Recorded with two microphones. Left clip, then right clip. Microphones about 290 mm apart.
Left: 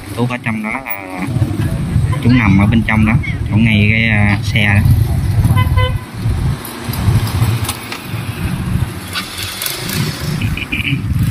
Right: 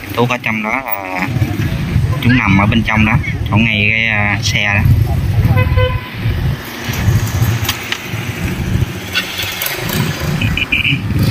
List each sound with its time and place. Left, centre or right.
0.2 s speech: centre
10.5 s vehicle: left